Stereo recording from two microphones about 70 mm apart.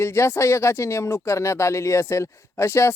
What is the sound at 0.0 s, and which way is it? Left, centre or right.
Speech, left.